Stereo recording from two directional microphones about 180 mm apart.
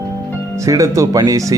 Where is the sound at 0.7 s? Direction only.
15° right (ahead or behind).